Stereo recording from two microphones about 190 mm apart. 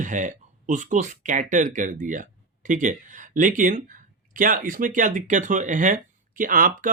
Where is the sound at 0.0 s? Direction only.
40° right (ahead or behind).